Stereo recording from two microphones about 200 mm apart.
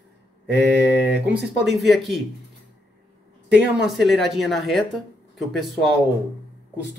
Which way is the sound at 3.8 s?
Centre (ahead or behind).